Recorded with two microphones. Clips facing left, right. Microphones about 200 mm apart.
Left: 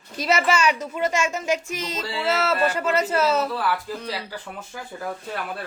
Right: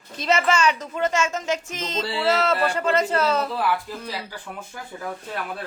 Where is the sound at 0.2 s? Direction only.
10° left (ahead or behind).